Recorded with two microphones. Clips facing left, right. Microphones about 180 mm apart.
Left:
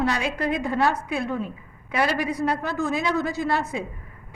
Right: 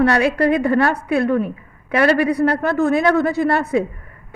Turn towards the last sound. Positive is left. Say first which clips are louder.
# right 8 dB
turn(degrees=-60)  # may be behind; listen again after turning